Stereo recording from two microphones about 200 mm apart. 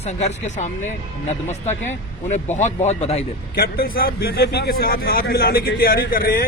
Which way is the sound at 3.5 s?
50° left (ahead or behind).